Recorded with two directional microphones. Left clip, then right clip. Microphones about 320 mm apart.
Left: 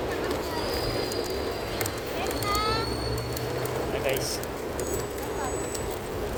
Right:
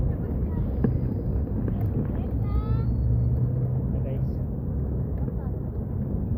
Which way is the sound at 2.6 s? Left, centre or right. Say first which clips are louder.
Left 13 dB; right.